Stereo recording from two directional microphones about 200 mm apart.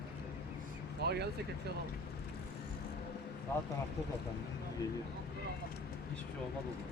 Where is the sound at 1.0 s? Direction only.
55° right (ahead or behind).